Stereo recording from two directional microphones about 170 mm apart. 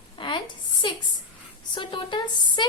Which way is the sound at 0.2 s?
30° left (ahead or behind).